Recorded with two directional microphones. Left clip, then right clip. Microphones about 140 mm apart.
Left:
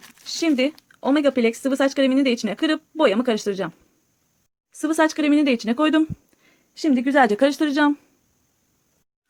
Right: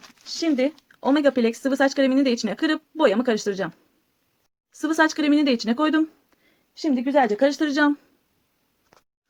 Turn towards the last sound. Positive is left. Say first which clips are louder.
# left 1 dB
turn(degrees=20)  # may be behind; listen again after turning